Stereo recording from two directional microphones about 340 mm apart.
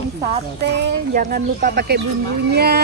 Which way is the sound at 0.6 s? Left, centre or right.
Right.